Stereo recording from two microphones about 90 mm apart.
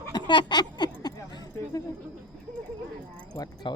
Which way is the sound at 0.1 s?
55° left (ahead or behind).